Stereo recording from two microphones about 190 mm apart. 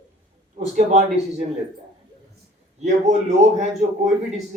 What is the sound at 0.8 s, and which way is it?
Speech, 40° right (ahead or behind).